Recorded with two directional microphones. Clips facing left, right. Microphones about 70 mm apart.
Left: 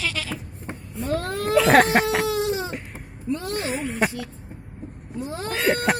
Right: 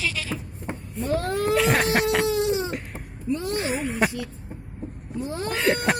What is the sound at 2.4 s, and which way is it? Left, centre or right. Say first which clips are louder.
Baby cry: right 1 dB; left.